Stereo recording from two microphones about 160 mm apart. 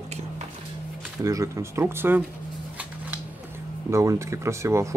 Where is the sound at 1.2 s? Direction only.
20° right (ahead or behind).